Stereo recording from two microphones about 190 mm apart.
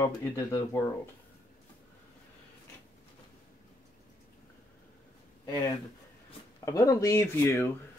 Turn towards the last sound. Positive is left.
turn(degrees=15)  # may be behind; listen again after turning